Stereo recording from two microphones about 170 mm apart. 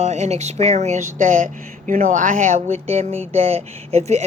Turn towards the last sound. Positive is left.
turn(degrees=-40)  # may be behind; listen again after turning